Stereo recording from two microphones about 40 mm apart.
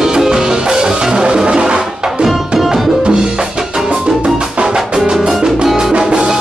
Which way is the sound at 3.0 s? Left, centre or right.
Right.